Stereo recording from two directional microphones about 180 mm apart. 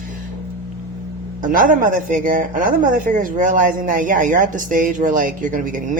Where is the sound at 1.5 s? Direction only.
50° right (ahead or behind).